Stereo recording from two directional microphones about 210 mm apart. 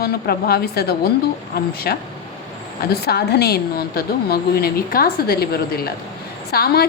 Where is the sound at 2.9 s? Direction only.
50° left (ahead or behind).